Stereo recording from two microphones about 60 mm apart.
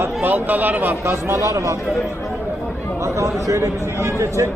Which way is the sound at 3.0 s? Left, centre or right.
Right.